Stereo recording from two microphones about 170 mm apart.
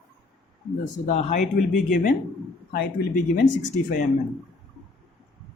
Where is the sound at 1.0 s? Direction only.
45° left (ahead or behind).